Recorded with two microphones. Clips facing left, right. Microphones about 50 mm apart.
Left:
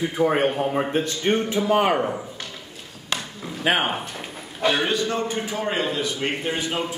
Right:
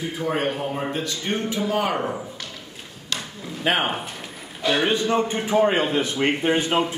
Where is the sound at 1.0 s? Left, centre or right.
Left.